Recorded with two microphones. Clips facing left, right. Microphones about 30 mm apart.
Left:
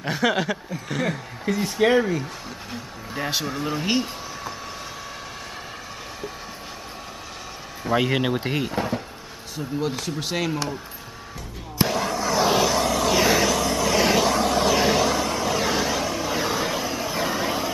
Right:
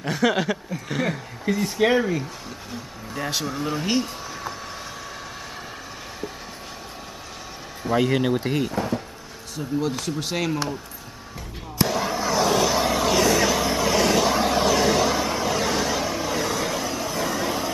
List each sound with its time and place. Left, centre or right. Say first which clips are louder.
0.0 s speech: right 1 dB; centre
2.7 s speech: left 1 dB; centre
7.8 s speech: right 1 dB; centre
11.9 s a sound: even; centre
12.6 s vehicle: even; centre
13.9 s vehicle: left 1 dB; centre
14.3 s vehicle: even; centre
14.7 s a sound: even; centre
15.0 s vehicle: even; centre
16.3 s vehicle: left 1 dB; centre